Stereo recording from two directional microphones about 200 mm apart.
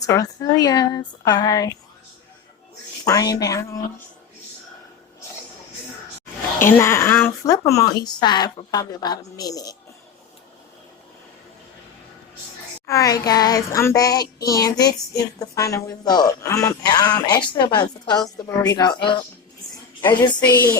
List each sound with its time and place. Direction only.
0.0 s speech: 20° left (ahead or behind)
3.0 s speech: 20° left (ahead or behind)
6.6 s a woman's voice: 10° left (ahead or behind)
12.9 s a woman's voice: 15° left (ahead or behind)
20.5 s speech: 10° left (ahead or behind)